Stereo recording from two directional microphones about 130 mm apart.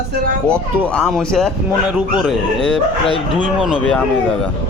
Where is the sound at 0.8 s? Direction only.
10° left (ahead or behind).